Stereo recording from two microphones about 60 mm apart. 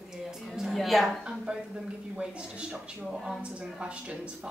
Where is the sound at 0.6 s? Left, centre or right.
Centre.